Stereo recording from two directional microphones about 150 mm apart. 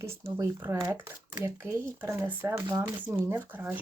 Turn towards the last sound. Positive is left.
turn(degrees=-10)  # may be behind; listen again after turning